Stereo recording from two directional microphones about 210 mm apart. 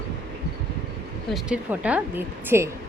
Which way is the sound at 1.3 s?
5° right (ahead or behind).